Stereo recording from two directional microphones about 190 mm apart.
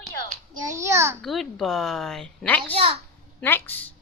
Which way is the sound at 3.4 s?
10° left (ahead or behind).